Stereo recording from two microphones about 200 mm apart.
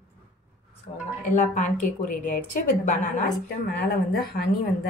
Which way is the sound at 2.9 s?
40° left (ahead or behind).